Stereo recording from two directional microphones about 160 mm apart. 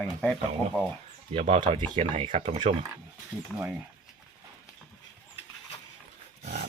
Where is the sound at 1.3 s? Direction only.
40° right (ahead or behind).